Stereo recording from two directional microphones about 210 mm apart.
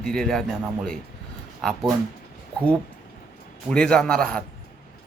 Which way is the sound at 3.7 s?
5° left (ahead or behind).